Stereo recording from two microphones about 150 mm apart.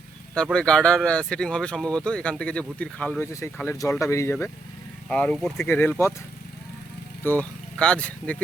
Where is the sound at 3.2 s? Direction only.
20° left (ahead or behind).